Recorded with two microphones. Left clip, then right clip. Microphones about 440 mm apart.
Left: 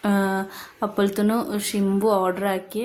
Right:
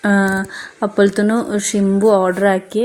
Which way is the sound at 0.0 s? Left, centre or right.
Left.